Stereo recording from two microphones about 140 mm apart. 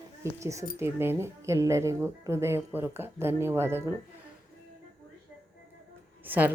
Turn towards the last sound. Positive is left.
turn(degrees=-15)  # may be behind; listen again after turning